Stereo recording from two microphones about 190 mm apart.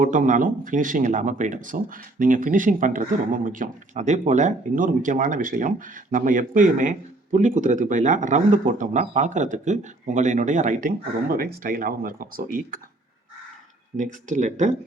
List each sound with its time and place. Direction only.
0.0 s speech: 45° right (ahead or behind)
13.9 s speech: 40° right (ahead or behind)